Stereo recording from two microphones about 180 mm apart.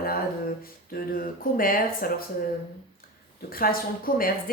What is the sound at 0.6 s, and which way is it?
Speech, 55° left (ahead or behind).